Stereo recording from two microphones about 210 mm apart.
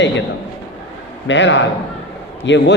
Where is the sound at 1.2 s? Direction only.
60° left (ahead or behind).